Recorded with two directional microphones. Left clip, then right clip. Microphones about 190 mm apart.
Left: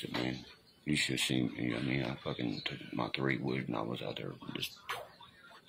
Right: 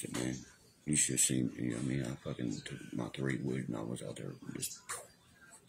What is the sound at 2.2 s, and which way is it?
Speech, 20° right (ahead or behind).